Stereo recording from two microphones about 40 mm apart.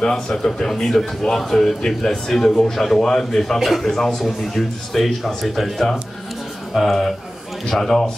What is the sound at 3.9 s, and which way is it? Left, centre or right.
A man's voice, centre.